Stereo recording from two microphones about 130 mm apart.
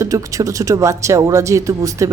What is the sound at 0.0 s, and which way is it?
Speech, 25° right (ahead or behind).